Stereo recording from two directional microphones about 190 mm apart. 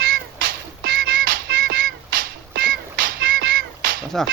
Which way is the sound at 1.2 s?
50° right (ahead or behind).